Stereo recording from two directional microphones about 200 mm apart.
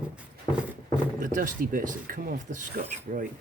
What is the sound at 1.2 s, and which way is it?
Speech, 40° right (ahead or behind).